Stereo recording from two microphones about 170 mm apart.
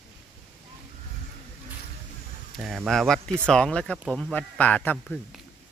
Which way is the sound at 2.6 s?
Centre (ahead or behind).